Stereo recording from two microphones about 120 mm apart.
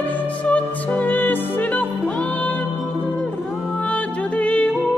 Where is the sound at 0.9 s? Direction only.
15° left (ahead or behind).